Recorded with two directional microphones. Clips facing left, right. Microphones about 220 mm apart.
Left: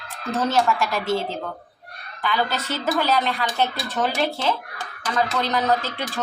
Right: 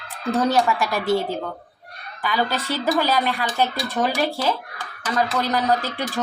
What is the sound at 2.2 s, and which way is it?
Speech, 10° right (ahead or behind).